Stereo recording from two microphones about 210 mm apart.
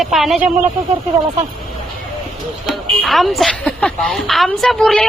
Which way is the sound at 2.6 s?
Centre (ahead or behind).